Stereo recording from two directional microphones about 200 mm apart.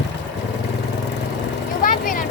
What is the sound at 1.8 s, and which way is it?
Vehicle, 45° left (ahead or behind).